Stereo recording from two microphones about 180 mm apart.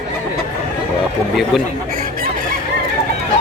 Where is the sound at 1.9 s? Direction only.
50° right (ahead or behind).